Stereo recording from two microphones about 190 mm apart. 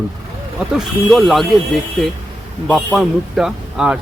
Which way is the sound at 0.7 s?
Centre (ahead or behind).